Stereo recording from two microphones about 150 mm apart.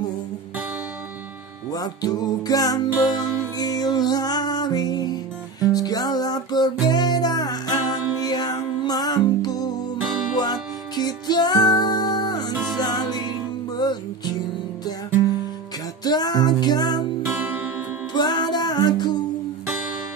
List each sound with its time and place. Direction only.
1.7 s music: 25° left (ahead or behind)
16.0 s music: 25° left (ahead or behind)
17.3 s music: 10° right (ahead or behind)
18.1 s music: 30° left (ahead or behind)